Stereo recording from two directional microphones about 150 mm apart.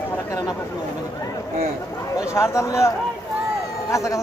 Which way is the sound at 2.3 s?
20° left (ahead or behind).